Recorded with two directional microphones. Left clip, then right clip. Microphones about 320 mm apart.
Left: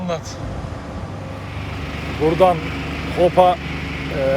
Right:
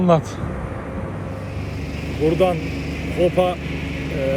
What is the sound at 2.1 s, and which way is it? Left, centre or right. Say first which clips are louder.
Speech: left 3 dB; centre.